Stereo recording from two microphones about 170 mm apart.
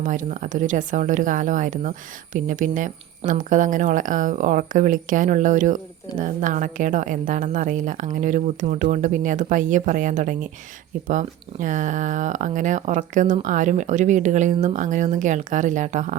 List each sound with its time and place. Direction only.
0.0 s speech: 50° right (ahead or behind)